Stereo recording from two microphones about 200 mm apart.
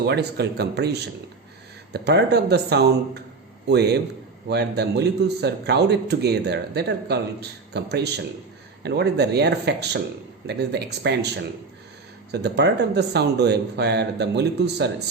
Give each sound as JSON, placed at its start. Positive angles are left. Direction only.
{"t": 0.0, "sound": "a man's voice", "side_deg": -55}
{"t": 12.3, "sound": "a man's voice", "side_deg": -55}